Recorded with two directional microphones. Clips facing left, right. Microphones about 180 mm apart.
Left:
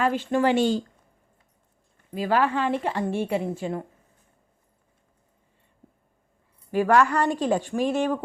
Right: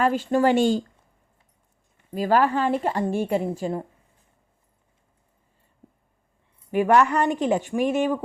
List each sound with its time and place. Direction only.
0.0 s speech: 40° right (ahead or behind)
2.1 s a woman's voice: 40° right (ahead or behind)
6.7 s a woman's voice: 20° right (ahead or behind)